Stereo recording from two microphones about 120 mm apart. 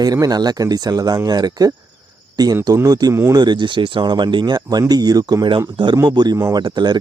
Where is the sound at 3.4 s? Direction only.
40° right (ahead or behind).